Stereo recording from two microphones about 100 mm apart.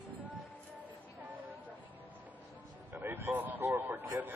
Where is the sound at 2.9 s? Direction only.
20° right (ahead or behind).